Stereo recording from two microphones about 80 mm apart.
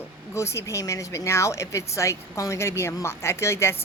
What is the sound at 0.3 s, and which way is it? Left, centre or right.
A woman's voice, left.